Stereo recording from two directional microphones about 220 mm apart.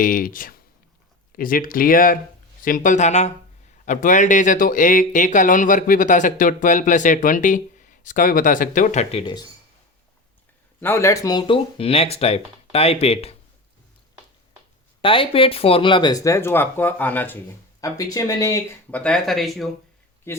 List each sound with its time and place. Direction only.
0.0 s speech: 40° left (ahead or behind)
10.8 s speech: 10° left (ahead or behind); by 13.3 s 25° left (ahead or behind)
15.0 s speech: 25° left (ahead or behind); by 19.7 s centre (ahead or behind)
20.3 s speech: 10° left (ahead or behind)